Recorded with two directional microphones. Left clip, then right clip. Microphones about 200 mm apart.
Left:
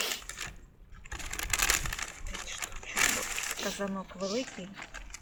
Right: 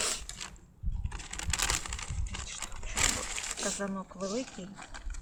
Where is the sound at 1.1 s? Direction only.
15° left (ahead or behind).